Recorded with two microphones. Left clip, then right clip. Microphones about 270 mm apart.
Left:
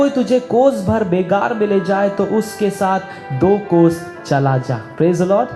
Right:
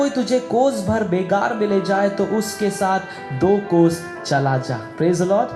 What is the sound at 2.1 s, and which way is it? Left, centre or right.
Speech, left.